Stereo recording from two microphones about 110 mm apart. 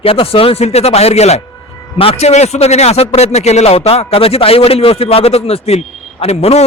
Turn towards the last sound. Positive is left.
turn(degrees=70)  # may be behind; listen again after turning